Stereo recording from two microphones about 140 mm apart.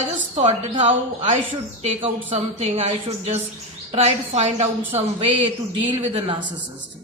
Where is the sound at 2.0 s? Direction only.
40° right (ahead or behind).